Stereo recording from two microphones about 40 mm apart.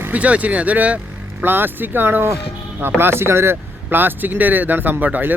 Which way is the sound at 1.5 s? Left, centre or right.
Right.